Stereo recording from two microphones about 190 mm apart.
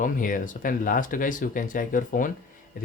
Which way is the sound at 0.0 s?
45° left (ahead or behind).